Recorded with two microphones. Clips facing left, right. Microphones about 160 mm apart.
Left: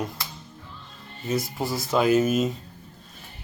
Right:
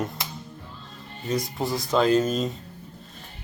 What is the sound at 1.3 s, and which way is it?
Speech, 5° left (ahead or behind).